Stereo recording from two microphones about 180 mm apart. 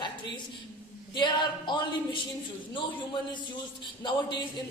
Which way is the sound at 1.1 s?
25° left (ahead or behind).